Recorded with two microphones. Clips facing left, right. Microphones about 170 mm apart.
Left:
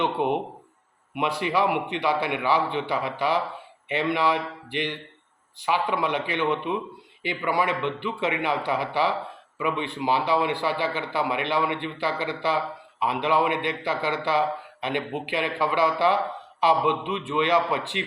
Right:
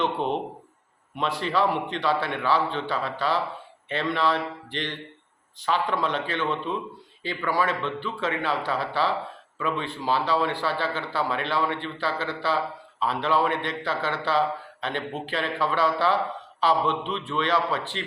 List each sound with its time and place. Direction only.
0.0 s a man's voice: 15° left (ahead or behind)